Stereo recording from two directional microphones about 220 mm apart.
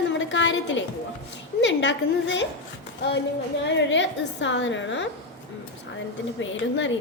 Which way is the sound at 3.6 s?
55° left (ahead or behind).